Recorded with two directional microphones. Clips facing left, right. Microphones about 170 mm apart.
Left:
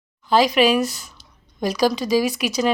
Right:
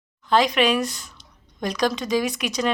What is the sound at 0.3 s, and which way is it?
A woman's voice, 5° left (ahead or behind).